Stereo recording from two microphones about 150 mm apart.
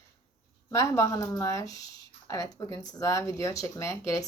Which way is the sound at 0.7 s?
20° left (ahead or behind).